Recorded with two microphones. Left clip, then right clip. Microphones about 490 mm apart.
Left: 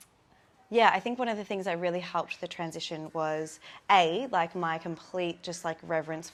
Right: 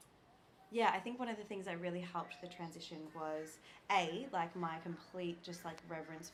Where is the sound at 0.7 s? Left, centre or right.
Left.